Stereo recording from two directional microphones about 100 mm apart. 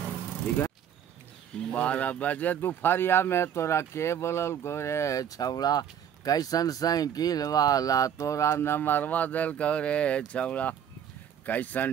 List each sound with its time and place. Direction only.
1.6 s speech: 10° left (ahead or behind)